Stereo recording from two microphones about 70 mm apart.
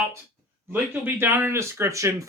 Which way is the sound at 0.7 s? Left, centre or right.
Right.